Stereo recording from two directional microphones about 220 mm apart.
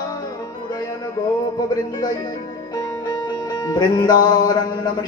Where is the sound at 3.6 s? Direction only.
20° left (ahead or behind).